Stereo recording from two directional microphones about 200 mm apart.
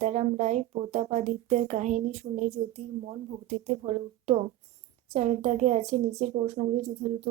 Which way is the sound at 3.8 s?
25° right (ahead or behind).